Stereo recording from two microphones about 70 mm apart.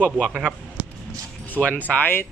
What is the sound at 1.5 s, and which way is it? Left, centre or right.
Speech, left.